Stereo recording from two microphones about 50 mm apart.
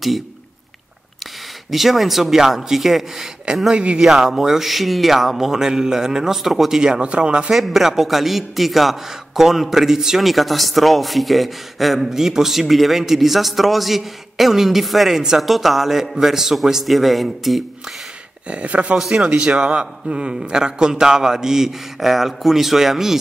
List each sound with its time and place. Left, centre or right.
1.7 s a man's voice: centre
3.7 s speech: right
4.0 s a man's voice: centre
7.5 s a man's voice: centre
18.5 s speech: right
18.9 s a man's voice: centre
19.2 s a man's voice: centre